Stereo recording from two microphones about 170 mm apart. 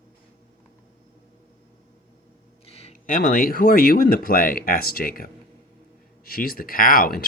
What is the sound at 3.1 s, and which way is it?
Speech, 55° left (ahead or behind).